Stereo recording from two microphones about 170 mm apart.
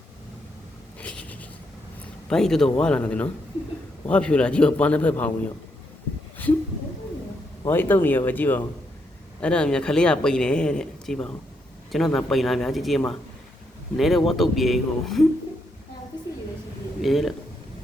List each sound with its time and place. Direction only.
0.9 s a sound: 10° left (ahead or behind)
2.3 s a man's voice: 5° left (ahead or behind)
7.6 s a man's voice: 10° left (ahead or behind)
17.0 s a man's voice: centre (ahead or behind)